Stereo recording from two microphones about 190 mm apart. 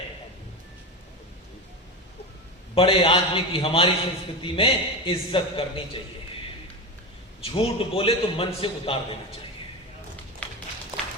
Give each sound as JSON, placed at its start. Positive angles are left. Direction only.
{"t": 2.7, "sound": "a man's voice", "side_deg": 30}
{"t": 7.4, "sound": "a man's voice", "side_deg": 30}
{"t": 10.4, "sound": "a sound", "side_deg": 5}